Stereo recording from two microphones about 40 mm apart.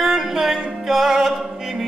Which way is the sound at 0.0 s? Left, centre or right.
Centre.